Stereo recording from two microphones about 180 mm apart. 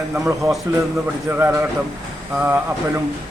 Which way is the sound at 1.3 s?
10° right (ahead or behind).